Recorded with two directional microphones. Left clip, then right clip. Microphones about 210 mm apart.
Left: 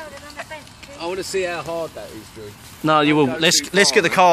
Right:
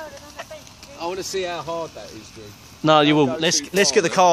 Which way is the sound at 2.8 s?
35° right (ahead or behind).